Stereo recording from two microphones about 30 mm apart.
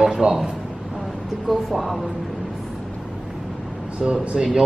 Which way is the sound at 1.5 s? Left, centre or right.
Centre.